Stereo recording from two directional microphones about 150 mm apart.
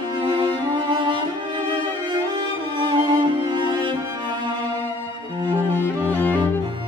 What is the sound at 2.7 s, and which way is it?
Music, 30° right (ahead or behind).